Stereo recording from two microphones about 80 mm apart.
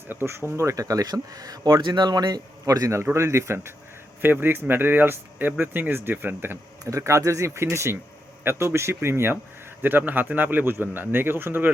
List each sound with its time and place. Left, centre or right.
0.1 s a man's voice: right
6.8 s a man's voice: right